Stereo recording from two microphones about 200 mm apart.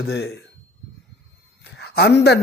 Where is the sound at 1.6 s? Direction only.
55° left (ahead or behind).